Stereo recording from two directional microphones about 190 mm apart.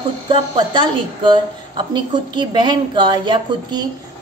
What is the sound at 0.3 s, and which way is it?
A woman's voice, 25° right (ahead or behind).